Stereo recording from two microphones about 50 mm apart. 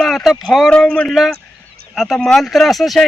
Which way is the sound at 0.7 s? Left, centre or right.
Centre.